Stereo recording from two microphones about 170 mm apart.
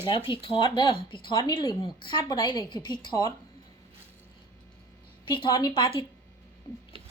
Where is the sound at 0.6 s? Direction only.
25° left (ahead or behind).